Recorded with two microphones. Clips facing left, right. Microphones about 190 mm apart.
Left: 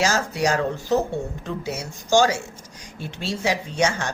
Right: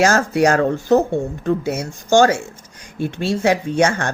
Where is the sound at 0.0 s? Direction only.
55° right (ahead or behind).